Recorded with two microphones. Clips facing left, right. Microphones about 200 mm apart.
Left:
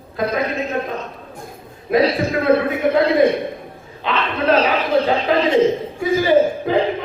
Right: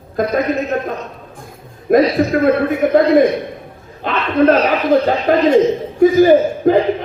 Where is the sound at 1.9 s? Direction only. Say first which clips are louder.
Right 4 dB; 45° right (ahead or behind).